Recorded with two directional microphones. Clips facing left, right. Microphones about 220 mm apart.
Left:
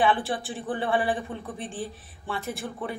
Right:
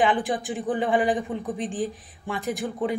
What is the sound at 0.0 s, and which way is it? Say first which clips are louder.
A man's voice: right 2 dB; 15° right (ahead or behind).